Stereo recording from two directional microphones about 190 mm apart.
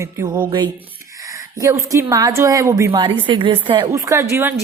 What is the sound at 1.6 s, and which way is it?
A woman's voice, 15° right (ahead or behind).